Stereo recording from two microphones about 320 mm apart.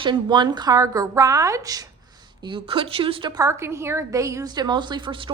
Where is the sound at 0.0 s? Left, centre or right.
Centre.